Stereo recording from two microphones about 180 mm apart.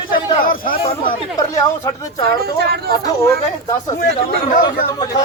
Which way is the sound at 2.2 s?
60° right (ahead or behind).